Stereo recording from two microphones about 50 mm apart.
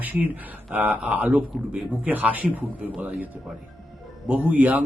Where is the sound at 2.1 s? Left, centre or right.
Right.